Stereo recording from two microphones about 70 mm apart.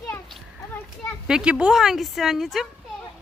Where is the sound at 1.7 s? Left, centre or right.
Centre.